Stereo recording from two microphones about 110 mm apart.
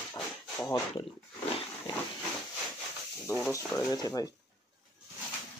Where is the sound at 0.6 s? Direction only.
25° left (ahead or behind).